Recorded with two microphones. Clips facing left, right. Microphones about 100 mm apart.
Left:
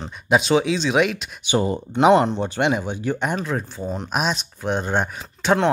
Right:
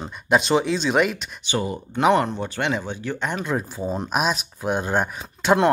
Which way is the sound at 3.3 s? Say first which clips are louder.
Even; 10° right (ahead or behind).